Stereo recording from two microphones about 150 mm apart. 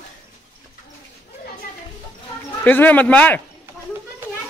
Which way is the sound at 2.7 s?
10° left (ahead or behind).